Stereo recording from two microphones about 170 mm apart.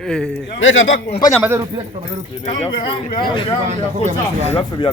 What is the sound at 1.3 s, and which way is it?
Speech, 10° right (ahead or behind).